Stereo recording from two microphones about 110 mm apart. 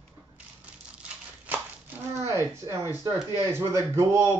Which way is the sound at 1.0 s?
15° right (ahead or behind).